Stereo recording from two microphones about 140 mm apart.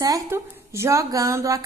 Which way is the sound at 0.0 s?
25° right (ahead or behind).